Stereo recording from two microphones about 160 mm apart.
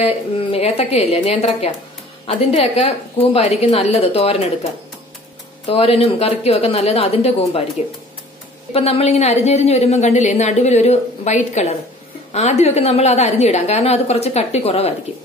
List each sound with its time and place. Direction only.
0.0 s a woman's voice: 35° left (ahead or behind)
5.7 s a woman's voice: 35° left (ahead or behind)
8.7 s a woman's voice: 40° left (ahead or behind)